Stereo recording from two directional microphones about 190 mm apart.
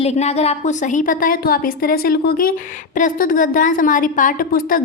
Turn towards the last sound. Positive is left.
turn(degrees=50)  # may be behind; listen again after turning